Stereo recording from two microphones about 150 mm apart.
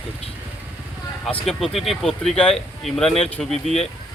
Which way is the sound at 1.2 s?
Centre (ahead or behind).